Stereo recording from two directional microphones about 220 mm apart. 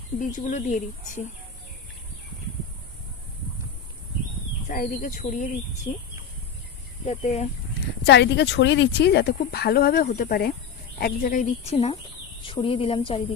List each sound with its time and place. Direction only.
0.2 s speech: 35° left (ahead or behind)
4.7 s speech: 35° left (ahead or behind)
5.9 s a woman's voice: 20° left (ahead or behind)
7.1 s a woman's voice: 30° left (ahead or behind)
8.0 s a woman's voice: 50° left (ahead or behind); by 13.2 s 25° left (ahead or behind)